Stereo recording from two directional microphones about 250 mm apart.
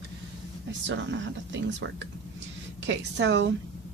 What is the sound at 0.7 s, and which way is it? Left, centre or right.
Speech, right.